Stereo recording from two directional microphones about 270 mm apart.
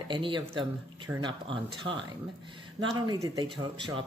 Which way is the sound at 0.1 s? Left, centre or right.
Centre.